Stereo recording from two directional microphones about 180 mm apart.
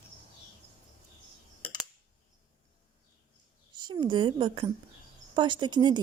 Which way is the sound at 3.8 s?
25° right (ahead or behind).